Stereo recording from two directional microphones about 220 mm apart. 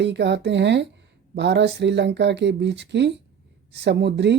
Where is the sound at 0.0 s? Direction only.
50° right (ahead or behind).